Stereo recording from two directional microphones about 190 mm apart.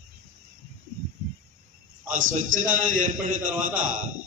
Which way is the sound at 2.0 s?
45° right (ahead or behind).